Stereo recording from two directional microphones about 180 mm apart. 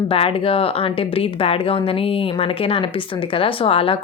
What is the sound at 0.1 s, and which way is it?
Speech, 30° left (ahead or behind).